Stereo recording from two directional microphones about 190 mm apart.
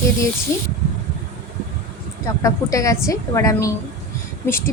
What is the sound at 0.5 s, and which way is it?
Speech, 15° left (ahead or behind).